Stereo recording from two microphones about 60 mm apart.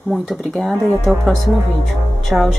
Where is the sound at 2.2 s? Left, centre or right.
Centre.